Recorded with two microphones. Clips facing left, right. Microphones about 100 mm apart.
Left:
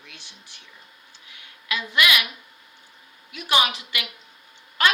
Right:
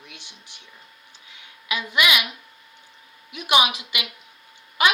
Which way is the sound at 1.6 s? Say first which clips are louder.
Even; 15° right (ahead or behind).